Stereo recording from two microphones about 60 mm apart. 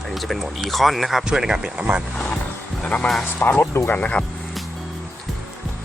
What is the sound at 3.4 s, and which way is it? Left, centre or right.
Speech, left.